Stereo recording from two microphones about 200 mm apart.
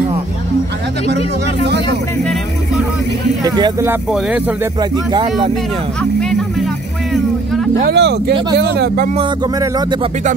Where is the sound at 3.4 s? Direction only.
20° right (ahead or behind).